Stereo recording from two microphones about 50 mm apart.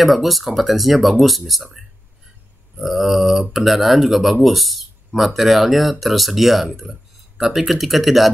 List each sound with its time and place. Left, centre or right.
0.0 s speech: centre